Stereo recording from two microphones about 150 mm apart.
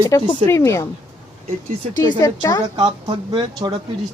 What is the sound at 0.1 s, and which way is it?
Speech, 20° left (ahead or behind).